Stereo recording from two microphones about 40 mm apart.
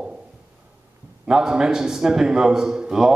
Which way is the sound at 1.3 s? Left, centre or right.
Centre.